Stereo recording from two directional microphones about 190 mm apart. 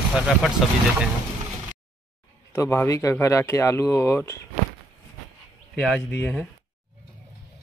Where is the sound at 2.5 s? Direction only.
15° left (ahead or behind).